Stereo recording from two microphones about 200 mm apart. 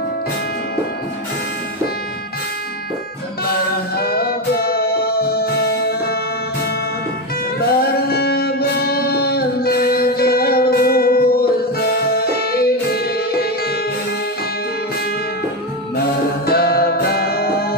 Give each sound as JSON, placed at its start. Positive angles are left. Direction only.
{"t": 3.9, "sound": "music", "side_deg": 50}
{"t": 8.1, "sound": "music", "side_deg": 50}
{"t": 16.4, "sound": "music", "side_deg": 50}